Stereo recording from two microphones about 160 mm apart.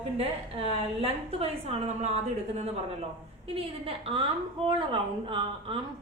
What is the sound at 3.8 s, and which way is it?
A woman's voice, 35° right (ahead or behind).